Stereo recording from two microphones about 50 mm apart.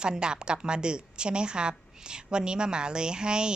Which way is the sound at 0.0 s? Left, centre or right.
Centre.